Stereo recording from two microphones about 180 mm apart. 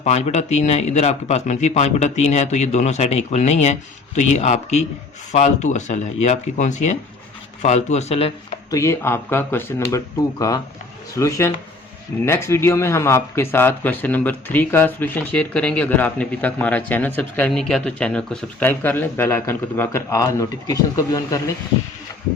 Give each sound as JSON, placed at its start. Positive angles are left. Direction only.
{"t": 0.0, "sound": "speech", "side_deg": 35}
{"t": 8.7, "sound": "speech", "side_deg": 15}